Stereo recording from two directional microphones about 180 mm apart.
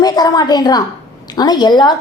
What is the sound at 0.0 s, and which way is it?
A woman's voice, 20° left (ahead or behind).